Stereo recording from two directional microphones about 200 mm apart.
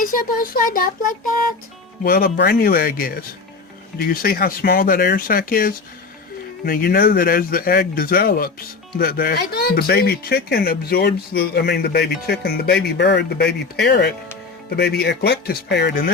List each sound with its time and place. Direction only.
0.0 s speech: 45° left (ahead or behind)